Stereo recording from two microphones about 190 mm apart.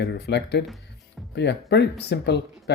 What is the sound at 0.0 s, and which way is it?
Speech, 60° left (ahead or behind).